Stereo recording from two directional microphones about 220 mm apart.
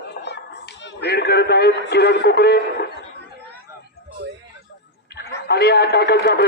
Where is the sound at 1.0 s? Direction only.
45° left (ahead or behind).